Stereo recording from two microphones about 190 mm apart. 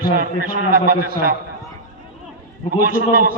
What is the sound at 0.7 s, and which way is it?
Speech, 50° right (ahead or behind).